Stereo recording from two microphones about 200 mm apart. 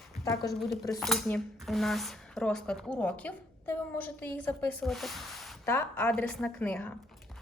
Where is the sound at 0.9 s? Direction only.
Centre (ahead or behind).